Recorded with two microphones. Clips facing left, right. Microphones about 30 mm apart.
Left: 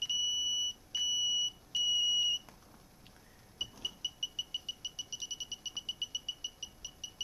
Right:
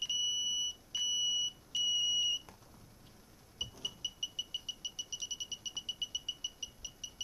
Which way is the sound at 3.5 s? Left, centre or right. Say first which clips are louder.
Left 1 dB; centre.